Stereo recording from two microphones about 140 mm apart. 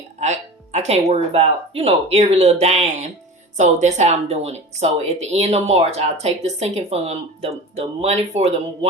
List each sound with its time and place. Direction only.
0.2 s speech: 55° right (ahead or behind)